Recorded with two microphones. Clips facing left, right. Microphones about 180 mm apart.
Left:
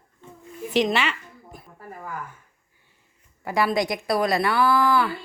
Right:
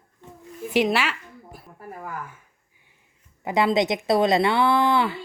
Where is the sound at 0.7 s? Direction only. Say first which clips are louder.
Even; 5° right (ahead or behind).